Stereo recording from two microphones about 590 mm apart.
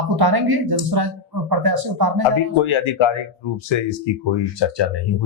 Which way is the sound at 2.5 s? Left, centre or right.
Left.